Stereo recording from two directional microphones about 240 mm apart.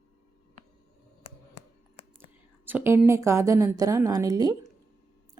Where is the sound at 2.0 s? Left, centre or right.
Left.